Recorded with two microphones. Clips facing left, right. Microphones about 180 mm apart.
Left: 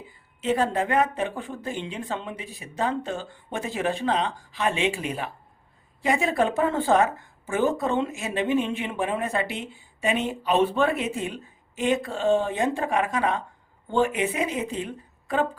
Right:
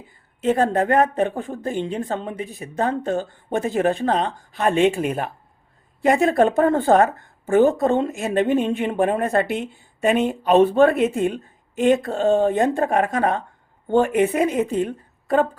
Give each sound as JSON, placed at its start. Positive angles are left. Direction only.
{"t": 0.4, "sound": "speech", "side_deg": -50}